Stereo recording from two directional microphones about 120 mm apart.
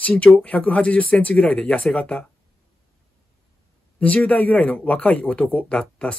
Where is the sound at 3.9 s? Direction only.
10° left (ahead or behind).